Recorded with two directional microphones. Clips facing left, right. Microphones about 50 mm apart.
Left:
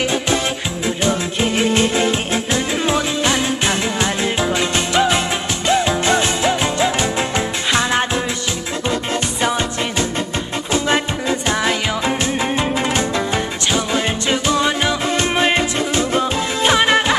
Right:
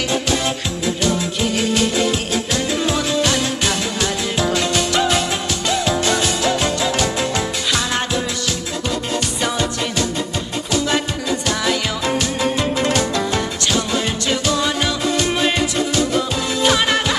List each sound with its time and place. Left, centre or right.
1.0 s music: left
9.4 s music: left